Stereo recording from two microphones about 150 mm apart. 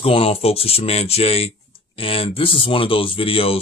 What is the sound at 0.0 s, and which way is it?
Speech, 40° left (ahead or behind).